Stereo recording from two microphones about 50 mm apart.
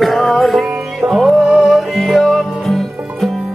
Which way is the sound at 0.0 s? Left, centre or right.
Centre.